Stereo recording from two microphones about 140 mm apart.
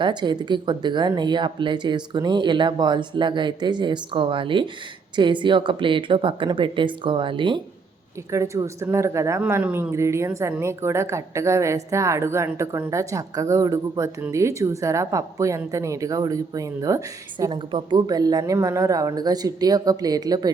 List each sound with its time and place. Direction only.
0.0 s speech: 35° right (ahead or behind)
8.3 s a woman's voice: 20° right (ahead or behind)
17.4 s a woman's voice: 35° right (ahead or behind)